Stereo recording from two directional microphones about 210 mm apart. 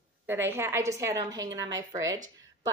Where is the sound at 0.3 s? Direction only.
10° right (ahead or behind).